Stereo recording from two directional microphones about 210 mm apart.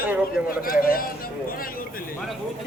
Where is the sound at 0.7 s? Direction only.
45° left (ahead or behind).